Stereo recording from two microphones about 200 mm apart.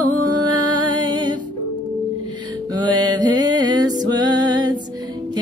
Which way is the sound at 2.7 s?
20° right (ahead or behind).